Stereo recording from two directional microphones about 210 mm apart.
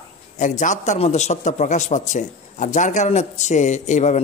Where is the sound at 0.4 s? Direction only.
35° left (ahead or behind).